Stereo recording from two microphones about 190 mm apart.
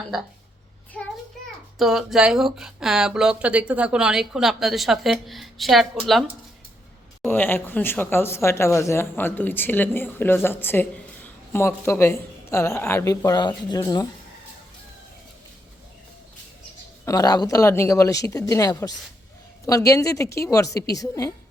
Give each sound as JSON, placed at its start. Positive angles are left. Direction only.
{"t": 0.9, "sound": "a sound", "side_deg": 5}
{"t": 1.8, "sound": "speech", "side_deg": 0}
{"t": 7.3, "sound": "speech", "side_deg": 10}
{"t": 17.1, "sound": "speech", "side_deg": 20}